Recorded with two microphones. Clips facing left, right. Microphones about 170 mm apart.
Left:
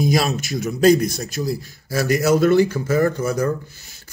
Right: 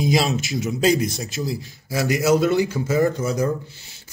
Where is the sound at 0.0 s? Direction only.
50° left (ahead or behind).